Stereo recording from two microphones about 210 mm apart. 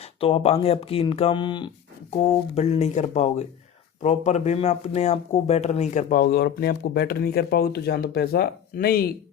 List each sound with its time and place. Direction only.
0.0 s speech: 25° left (ahead or behind); by 9.1 s 45° left (ahead or behind)